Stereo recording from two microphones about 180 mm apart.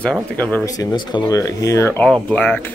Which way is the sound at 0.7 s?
25° left (ahead or behind).